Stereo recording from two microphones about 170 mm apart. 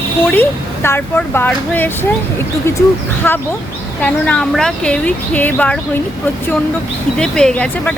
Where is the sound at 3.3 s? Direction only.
10° left (ahead or behind).